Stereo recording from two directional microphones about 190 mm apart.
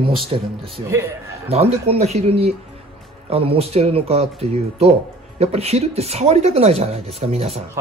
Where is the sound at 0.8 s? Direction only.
15° right (ahead or behind).